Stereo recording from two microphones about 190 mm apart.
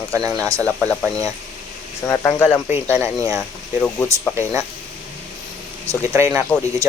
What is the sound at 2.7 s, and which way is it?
Speech, 10° right (ahead or behind).